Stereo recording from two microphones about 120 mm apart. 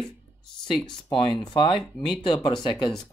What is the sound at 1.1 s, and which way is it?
Speech, 45° left (ahead or behind).